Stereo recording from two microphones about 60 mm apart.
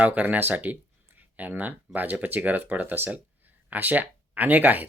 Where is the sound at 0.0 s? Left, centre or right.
Right.